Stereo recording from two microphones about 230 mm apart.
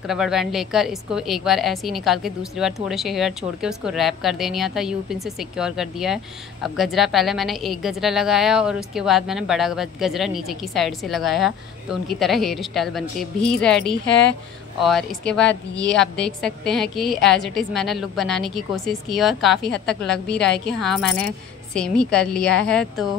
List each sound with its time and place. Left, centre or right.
0.0 s a woman's voice: centre